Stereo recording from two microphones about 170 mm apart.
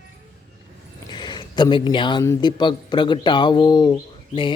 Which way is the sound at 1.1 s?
25° left (ahead or behind).